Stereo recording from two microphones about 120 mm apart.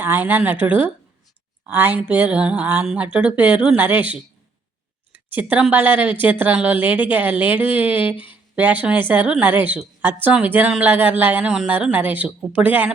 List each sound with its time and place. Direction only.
0.0 s a woman's voice: 15° right (ahead or behind)